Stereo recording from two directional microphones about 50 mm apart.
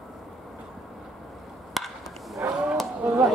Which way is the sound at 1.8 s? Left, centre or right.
Centre.